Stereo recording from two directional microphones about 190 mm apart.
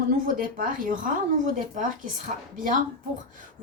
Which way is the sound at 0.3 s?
45° right (ahead or behind).